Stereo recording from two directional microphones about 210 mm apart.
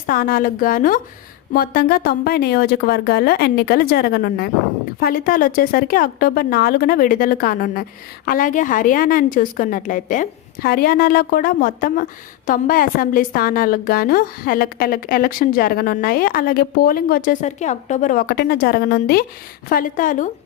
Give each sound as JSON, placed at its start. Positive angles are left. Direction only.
{"t": 0.0, "sound": "a woman's voice", "side_deg": 40}